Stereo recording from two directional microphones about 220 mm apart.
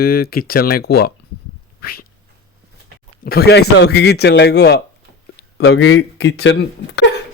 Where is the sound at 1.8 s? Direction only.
45° left (ahead or behind).